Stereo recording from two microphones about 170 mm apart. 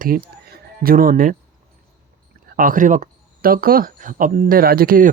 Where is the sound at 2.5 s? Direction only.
55° right (ahead or behind).